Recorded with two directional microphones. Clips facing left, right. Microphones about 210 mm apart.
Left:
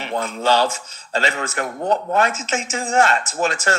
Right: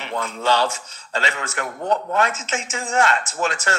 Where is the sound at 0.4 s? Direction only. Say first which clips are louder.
Left 2 dB; 40° left (ahead or behind).